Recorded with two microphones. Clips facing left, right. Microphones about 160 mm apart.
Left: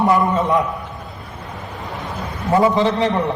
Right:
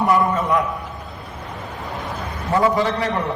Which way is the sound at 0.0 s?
20° left (ahead or behind).